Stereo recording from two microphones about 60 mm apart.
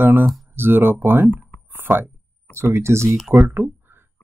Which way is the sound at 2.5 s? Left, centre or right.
Right.